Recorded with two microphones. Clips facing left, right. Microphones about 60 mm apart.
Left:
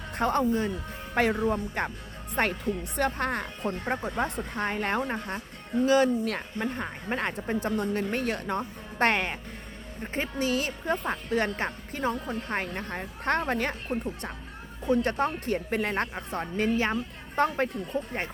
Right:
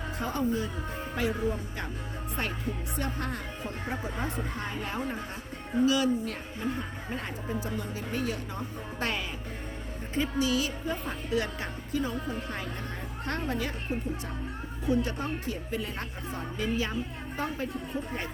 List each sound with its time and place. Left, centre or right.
0.2 s speech: left
5.8 s speech: left
6.2 s speech: left
10.2 s speech: left
14.8 s speech: left
17.3 s speech: left